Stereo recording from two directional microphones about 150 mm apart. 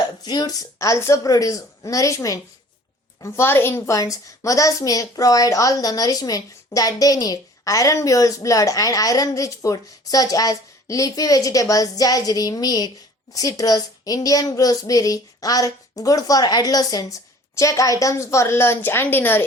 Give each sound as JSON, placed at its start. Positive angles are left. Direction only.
{"t": 0.3, "sound": "a woman's voice", "side_deg": 25}